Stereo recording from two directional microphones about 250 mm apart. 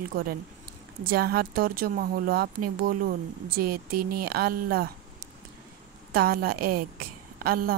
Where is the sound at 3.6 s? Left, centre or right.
Right.